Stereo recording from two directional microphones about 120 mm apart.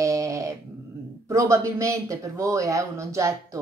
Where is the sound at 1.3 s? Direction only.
25° right (ahead or behind).